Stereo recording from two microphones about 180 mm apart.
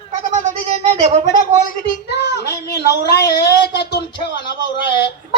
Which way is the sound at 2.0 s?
70° left (ahead or behind).